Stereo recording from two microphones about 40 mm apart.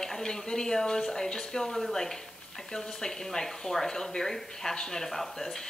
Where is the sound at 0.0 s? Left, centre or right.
Centre.